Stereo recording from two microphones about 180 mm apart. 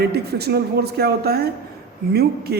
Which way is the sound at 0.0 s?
65° right (ahead or behind).